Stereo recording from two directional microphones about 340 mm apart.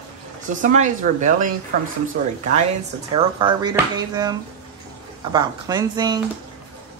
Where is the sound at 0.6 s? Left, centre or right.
Right.